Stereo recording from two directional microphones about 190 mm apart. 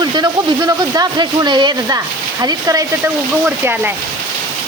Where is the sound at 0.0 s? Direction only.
20° right (ahead or behind).